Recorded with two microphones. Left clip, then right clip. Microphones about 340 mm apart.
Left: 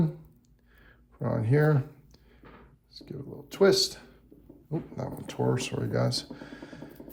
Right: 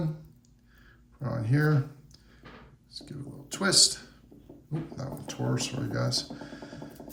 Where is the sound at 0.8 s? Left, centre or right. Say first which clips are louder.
Left 5 dB; centre.